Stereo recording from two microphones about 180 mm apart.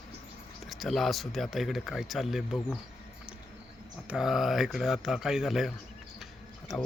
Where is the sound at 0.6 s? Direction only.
Centre (ahead or behind).